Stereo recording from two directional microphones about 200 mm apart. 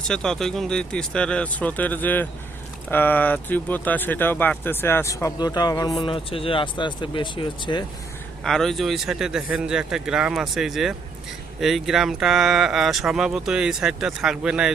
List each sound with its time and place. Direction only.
0.1 s speech: 5° left (ahead or behind); by 7.9 s 25° left (ahead or behind)
8.4 s speech: centre (ahead or behind)